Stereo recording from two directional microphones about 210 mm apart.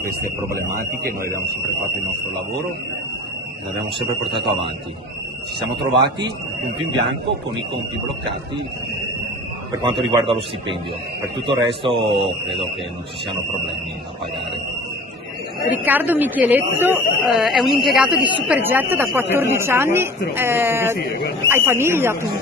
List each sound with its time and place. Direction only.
0.2 s speech: 15° right (ahead or behind)
0.7 s speech: 45° right (ahead or behind)
5.9 s a man's voice: 55° right (ahead or behind)
10.2 s speech: 25° right (ahead or behind)
15.6 s speech: 10° right (ahead or behind)
21.0 s speech: 45° left (ahead or behind)
21.5 s speech: 10° right (ahead or behind)